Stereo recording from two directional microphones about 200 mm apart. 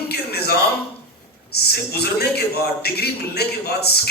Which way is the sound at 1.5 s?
55° left (ahead or behind).